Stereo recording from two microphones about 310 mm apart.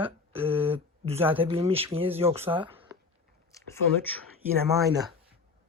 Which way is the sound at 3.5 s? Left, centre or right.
Centre.